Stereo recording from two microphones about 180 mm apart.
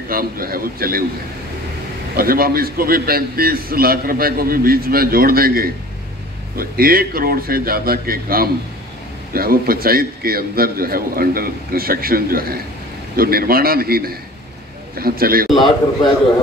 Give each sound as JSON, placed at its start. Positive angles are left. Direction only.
{"t": 0.1, "sound": "a man's voice", "side_deg": -55}
{"t": 2.1, "sound": "a man's voice", "side_deg": -55}